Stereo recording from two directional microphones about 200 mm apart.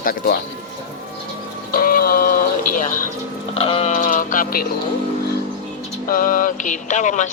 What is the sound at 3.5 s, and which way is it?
Speech, 30° left (ahead or behind).